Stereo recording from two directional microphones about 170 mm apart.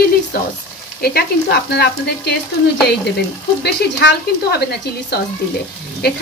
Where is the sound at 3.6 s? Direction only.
80° left.